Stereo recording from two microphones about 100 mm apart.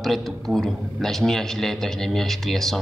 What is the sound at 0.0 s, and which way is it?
A man's voice, centre (ahead or behind).